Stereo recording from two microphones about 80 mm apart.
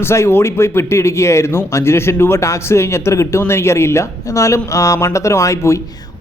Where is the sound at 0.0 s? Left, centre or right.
Left.